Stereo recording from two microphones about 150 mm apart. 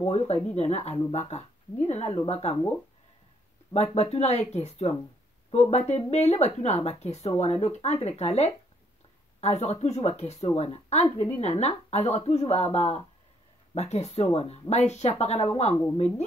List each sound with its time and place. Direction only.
0.0 s speech: 45° left (ahead or behind)
3.7 s speech: 45° left (ahead or behind)